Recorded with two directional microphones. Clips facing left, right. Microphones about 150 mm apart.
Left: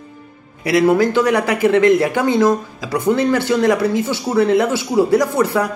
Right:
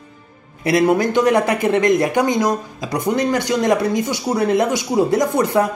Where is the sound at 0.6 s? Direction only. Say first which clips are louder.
Left 2 dB; 20° right (ahead or behind).